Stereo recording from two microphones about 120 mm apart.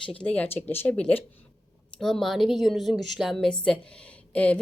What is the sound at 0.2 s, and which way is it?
A woman's voice, 15° left (ahead or behind).